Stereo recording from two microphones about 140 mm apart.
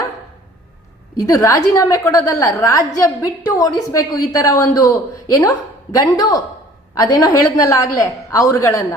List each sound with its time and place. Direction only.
1.2 s a woman's voice: 25° left (ahead or behind)